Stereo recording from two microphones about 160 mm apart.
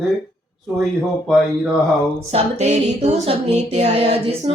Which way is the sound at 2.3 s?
45° right (ahead or behind).